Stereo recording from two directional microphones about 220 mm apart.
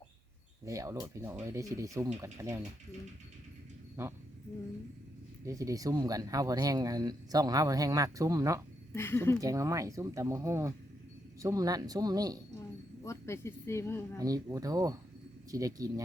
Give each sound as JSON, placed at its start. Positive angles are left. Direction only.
{"t": 0.6, "sound": "speech", "side_deg": -15}
{"t": 5.5, "sound": "speech", "side_deg": -15}
{"t": 8.9, "sound": "speech", "side_deg": 10}
{"t": 9.4, "sound": "speech", "side_deg": -15}
{"t": 13.1, "sound": "speech", "side_deg": 10}
{"t": 14.2, "sound": "speech", "side_deg": -15}